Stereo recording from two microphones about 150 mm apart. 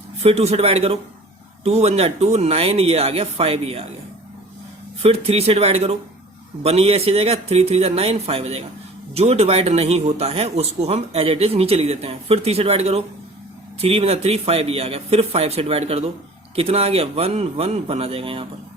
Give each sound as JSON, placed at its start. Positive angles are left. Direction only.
{"t": 0.2, "sound": "speech", "side_deg": -45}
{"t": 5.0, "sound": "a man's voice", "side_deg": -40}